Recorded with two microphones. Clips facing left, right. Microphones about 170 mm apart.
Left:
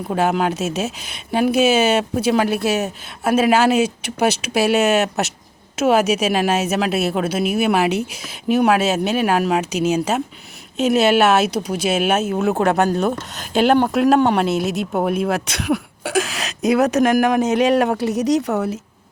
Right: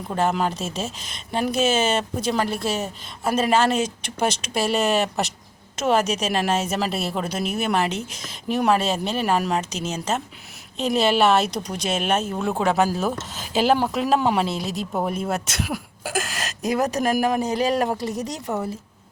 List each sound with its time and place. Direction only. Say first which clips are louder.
0.1 s speech: left 4 dB; 5° left (ahead or behind)
2.5 s speech: left 6 dB; 65° left (ahead or behind)
3.3 s speech: left 5 dB; 5° left (ahead or behind)
16.5 s speech: left 6 dB; 75° left (ahead or behind)